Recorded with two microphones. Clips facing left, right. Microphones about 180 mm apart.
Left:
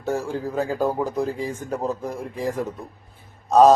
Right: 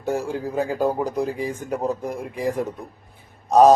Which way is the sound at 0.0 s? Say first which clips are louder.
Right 1 dB; 15° right (ahead or behind).